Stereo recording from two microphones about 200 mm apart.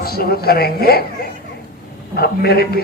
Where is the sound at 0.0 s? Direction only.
50° left (ahead or behind).